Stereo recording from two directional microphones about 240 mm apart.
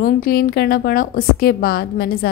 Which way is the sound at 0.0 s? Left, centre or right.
Left.